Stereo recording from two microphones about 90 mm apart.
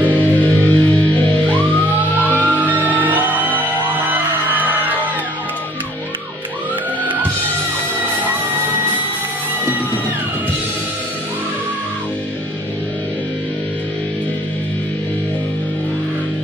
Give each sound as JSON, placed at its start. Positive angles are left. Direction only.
{"t": 0.0, "sound": "music", "side_deg": 20}
{"t": 2.4, "sound": "music", "side_deg": -20}